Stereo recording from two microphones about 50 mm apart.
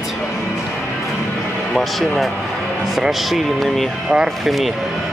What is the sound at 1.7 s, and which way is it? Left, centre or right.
Speech, centre.